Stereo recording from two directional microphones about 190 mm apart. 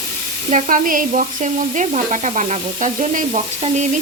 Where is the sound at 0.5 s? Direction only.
45° right (ahead or behind).